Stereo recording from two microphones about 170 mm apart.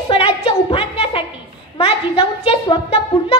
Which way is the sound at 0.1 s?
35° left (ahead or behind).